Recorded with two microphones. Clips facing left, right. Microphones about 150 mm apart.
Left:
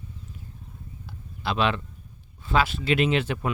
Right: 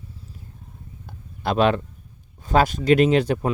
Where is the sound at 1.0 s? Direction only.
50° right (ahead or behind).